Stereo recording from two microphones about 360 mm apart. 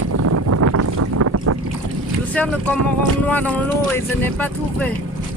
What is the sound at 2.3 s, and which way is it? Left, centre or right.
Speech, centre.